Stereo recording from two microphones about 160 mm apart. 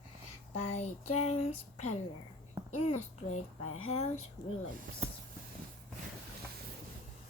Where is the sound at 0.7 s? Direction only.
40° left (ahead or behind).